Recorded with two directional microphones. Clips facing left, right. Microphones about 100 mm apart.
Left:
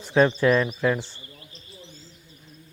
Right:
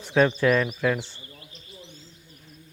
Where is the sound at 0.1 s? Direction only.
30° left (ahead or behind).